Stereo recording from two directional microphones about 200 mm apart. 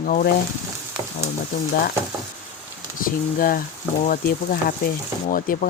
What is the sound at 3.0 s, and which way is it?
Speech, 45° left (ahead or behind).